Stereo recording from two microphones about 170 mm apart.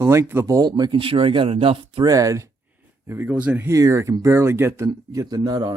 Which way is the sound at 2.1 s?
20° right (ahead or behind).